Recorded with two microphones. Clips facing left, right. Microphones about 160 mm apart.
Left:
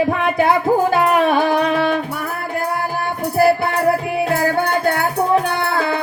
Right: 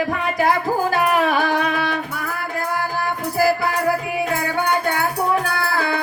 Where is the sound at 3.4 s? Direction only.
30° left (ahead or behind).